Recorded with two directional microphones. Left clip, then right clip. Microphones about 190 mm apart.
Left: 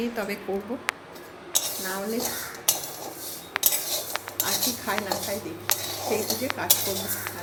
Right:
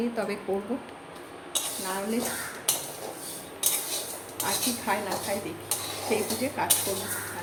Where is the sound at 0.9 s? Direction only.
40° left (ahead or behind).